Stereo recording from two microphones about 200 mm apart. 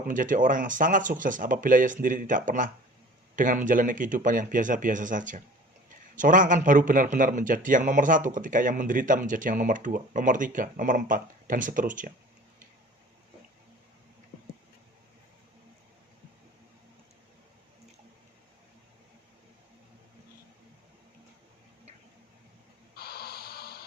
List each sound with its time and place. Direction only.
0.1 s a man's voice: 40° right (ahead or behind)
23.0 s music: 50° left (ahead or behind)